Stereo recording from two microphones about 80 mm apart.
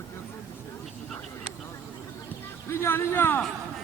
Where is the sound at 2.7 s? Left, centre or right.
Left.